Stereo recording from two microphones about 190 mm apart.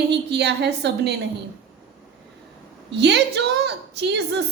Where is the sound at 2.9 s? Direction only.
65° right (ahead or behind).